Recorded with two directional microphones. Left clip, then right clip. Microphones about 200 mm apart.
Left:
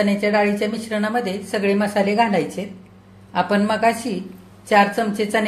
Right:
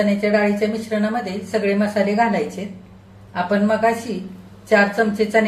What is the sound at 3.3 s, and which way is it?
A woman's voice, 50° left (ahead or behind).